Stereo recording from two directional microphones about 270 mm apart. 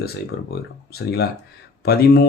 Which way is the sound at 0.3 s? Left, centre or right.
Left.